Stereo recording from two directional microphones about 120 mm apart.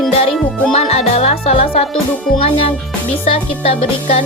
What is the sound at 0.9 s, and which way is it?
Music, 60° left (ahead or behind).